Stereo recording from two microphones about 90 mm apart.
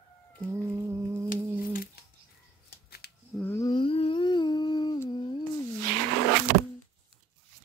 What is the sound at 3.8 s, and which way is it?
Humming, 90° left.